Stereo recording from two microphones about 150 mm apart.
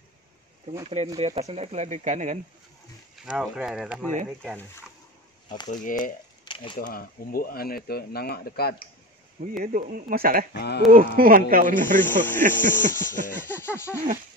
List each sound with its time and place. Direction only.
0.8 s speech: 45° right (ahead or behind)
3.3 s speech: 5° right (ahead or behind)
5.7 s speech: 65° left (ahead or behind)
6.4 s a sound: 35° left (ahead or behind)
6.8 s speech: 80° left
9.6 s speech: 65° right (ahead or behind)
10.5 s speech: 90° left
10.9 s speech: 70° right (ahead or behind)
12.0 s a sound: 15° left (ahead or behind)